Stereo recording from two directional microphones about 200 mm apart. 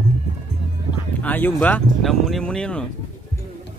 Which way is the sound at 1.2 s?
10° left (ahead or behind).